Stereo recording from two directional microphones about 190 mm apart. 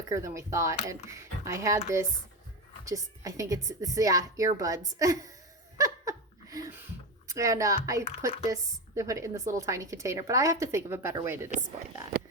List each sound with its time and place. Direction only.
0.1 s a woman's voice: 15° right (ahead or behind)
2.8 s a woman's voice: 15° right (ahead or behind)
5.7 s laughter: 15° right (ahead or behind)
7.3 s a woman's voice: 15° right (ahead or behind)